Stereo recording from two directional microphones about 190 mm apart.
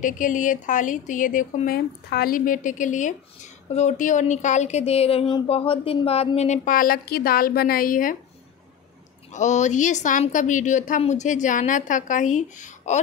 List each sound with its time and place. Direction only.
0.0 s speech: 45° left (ahead or behind)
9.3 s speech: 40° left (ahead or behind)